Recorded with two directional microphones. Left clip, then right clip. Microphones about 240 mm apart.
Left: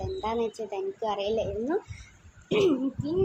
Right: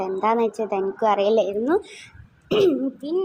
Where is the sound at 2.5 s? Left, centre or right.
Centre.